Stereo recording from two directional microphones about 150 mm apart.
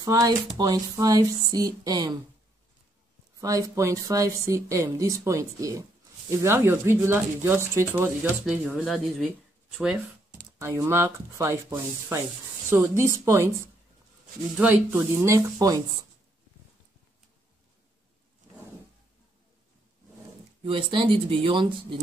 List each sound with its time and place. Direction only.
0.0 s a woman's voice: 25° right (ahead or behind)
3.3 s a woman's voice: 20° right (ahead or behind); by 9.3 s centre (ahead or behind)
10.6 s a woman's voice: 20° right (ahead or behind)
14.6 s speech: 10° right (ahead or behind)
20.6 s speech: 35° right (ahead or behind)